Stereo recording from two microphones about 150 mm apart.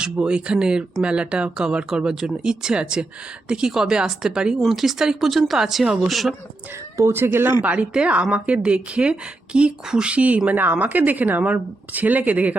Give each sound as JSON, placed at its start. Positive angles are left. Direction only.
{"t": 0.0, "sound": "speech", "side_deg": -5}
{"t": 6.9, "sound": "a woman's voice", "side_deg": -15}